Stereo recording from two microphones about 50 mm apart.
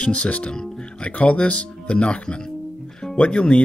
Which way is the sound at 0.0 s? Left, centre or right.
Left.